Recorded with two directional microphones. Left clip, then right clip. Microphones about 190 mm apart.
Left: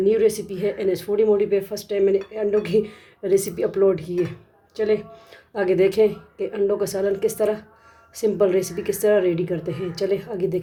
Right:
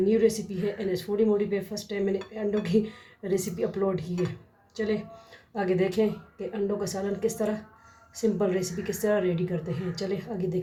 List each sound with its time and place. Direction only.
0.0 s speech: 50° left (ahead or behind)
5.5 s speech: 50° left (ahead or behind)